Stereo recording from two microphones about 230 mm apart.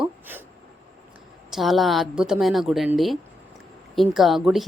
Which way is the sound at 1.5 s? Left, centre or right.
Centre.